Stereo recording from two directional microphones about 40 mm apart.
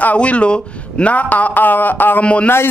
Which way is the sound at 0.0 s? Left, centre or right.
Left.